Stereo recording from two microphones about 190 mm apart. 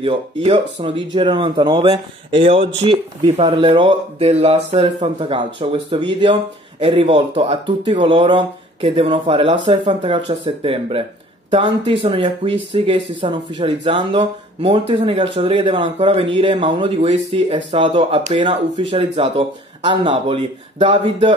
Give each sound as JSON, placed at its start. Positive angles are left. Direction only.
{"t": 0.0, "sound": "speech", "side_deg": -30}